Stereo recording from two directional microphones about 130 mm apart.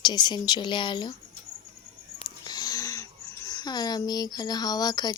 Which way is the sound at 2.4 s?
30° left (ahead or behind).